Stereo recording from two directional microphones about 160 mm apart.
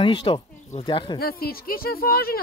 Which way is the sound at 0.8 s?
30° left (ahead or behind).